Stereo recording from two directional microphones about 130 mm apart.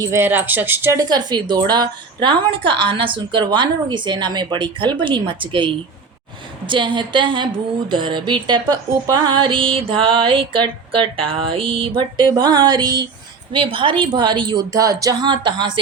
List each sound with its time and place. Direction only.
0.0 s speech: 20° right (ahead or behind); by 15.8 s 35° right (ahead or behind)